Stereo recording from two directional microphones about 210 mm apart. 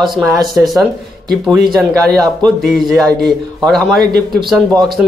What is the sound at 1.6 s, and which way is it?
Speech, 20° right (ahead or behind).